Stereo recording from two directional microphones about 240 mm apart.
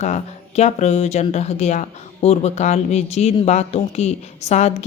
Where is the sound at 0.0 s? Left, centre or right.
Left.